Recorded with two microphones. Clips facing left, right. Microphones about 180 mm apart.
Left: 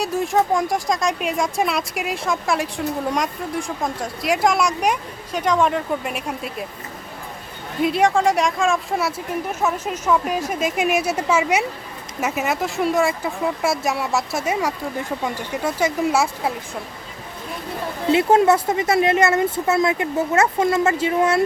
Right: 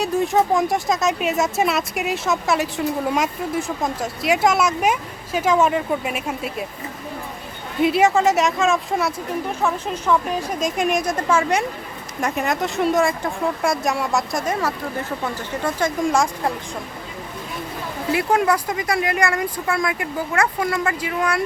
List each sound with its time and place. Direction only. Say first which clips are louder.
0.0 s speech: right 1 dB; centre (ahead or behind)
7.8 s speech: right 1 dB; centre (ahead or behind)
18.1 s speech: left 4 dB; 25° left (ahead or behind)